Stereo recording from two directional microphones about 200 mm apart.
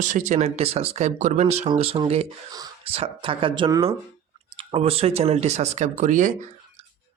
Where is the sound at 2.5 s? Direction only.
20° right (ahead or behind).